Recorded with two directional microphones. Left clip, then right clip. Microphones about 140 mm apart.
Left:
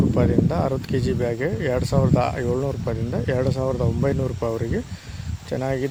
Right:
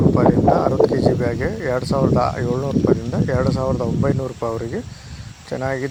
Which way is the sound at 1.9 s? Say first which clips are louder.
Right 5 dB; 15° left (ahead or behind).